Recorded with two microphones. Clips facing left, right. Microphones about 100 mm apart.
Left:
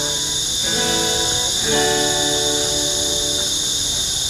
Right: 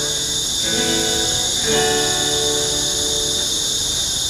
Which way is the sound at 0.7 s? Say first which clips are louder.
Even; 20° left (ahead or behind).